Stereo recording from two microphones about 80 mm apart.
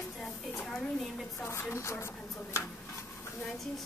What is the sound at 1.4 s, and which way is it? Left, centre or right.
Speech, left.